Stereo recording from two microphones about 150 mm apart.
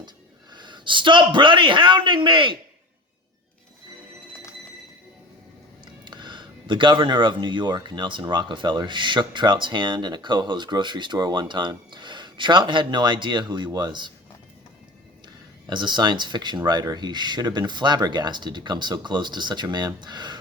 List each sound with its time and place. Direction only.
0.5 s speech: 30° right (ahead or behind)
5.8 s speech: 30° right (ahead or behind)
15.6 s speech: 30° right (ahead or behind)